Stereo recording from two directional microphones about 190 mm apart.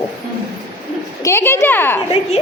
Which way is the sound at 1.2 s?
15° left (ahead or behind).